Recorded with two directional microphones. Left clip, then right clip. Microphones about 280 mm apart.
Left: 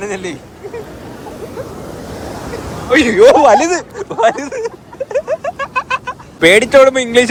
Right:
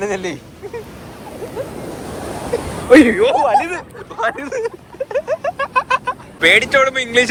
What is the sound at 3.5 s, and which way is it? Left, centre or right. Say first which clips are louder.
Speech: left 5 dB; left.